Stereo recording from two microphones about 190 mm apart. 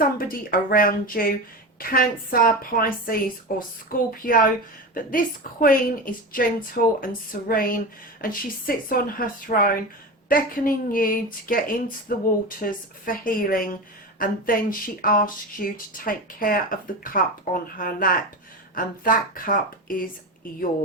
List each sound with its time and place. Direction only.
0.0 s speech: 50° left (ahead or behind)